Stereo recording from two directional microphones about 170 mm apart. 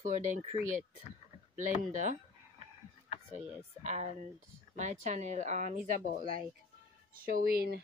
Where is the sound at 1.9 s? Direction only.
45° right (ahead or behind).